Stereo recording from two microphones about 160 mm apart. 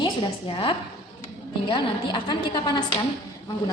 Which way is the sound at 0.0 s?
35° left (ahead or behind).